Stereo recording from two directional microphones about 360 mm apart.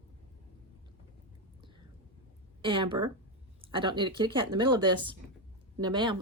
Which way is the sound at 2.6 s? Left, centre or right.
Centre.